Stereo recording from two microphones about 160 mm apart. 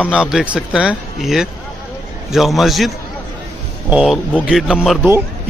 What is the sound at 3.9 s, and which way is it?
Speech, 5° right (ahead or behind).